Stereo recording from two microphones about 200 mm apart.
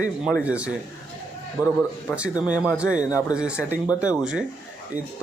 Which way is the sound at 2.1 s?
5° left (ahead or behind).